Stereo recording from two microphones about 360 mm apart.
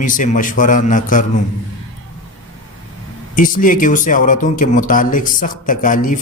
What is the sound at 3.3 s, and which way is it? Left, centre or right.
Speech, left.